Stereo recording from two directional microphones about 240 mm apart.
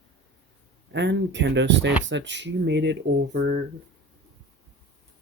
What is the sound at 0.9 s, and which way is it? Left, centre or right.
Speech, right.